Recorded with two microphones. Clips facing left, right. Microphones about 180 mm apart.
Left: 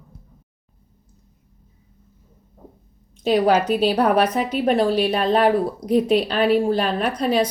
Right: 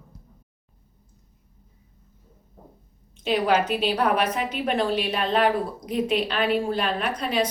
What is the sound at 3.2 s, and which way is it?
A woman's voice, 40° left (ahead or behind).